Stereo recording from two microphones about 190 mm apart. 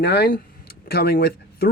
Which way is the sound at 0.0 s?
60° left (ahead or behind).